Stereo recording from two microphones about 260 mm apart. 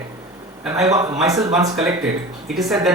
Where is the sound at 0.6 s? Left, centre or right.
Centre.